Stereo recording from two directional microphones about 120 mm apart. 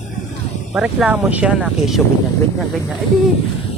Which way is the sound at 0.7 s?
5° right (ahead or behind).